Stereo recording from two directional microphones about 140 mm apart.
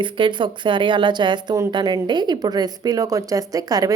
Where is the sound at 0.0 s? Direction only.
35° right (ahead or behind).